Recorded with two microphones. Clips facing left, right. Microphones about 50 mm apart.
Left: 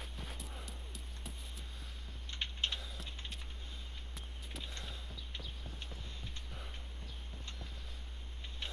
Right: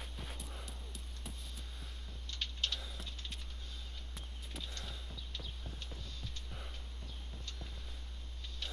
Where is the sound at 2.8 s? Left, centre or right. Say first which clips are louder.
Even; centre.